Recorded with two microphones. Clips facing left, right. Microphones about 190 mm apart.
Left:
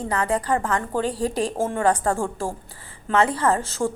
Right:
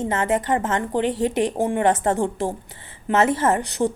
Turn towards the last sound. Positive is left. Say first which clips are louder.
# right 2 dB
turn(degrees=-20)  # may be behind; listen again after turning